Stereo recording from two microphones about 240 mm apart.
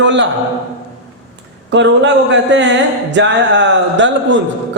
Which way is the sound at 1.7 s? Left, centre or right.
Right.